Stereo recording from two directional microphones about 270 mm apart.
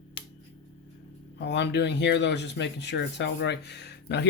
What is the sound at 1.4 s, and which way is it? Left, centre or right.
Speech, left.